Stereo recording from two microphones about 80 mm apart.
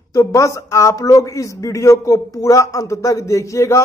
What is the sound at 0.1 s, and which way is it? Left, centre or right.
A man's voice, left.